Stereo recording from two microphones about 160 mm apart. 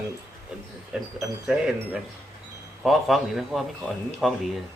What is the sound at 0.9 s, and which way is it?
Speech, 5° right (ahead or behind).